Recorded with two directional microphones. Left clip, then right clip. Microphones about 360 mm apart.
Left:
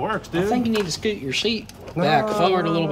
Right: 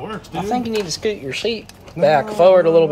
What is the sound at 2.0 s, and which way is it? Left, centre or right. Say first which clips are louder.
Speech: right 7 dB; left.